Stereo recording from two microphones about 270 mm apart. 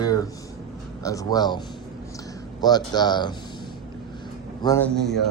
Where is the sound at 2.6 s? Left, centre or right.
Centre.